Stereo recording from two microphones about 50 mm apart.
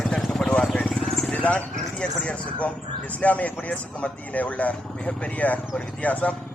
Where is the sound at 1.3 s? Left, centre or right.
Left.